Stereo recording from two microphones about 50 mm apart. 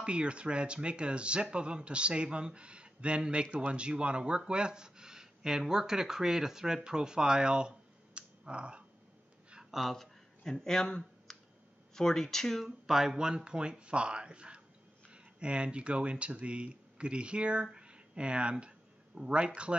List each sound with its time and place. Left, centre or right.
0.0 s speech: right
9.7 s speech: centre
12.6 s speech: centre; by 17.6 s right
17.7 s a sound: right